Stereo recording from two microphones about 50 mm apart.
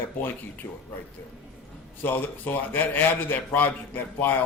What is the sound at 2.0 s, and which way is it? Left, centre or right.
A man's voice, left.